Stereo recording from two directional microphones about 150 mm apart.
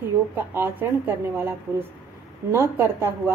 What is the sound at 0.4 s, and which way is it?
A woman's voice, 15° right (ahead or behind).